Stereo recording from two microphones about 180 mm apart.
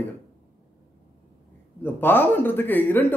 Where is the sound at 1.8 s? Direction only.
10° left (ahead or behind).